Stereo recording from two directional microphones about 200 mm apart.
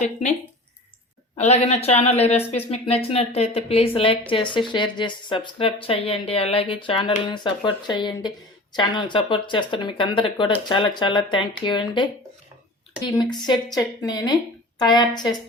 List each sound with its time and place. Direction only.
0.0 s speech: 35° left (ahead or behind)
1.4 s speech: 30° left (ahead or behind)
13.1 s speech: 20° left (ahead or behind)